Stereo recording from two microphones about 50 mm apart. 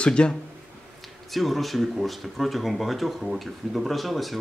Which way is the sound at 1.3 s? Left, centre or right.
Centre.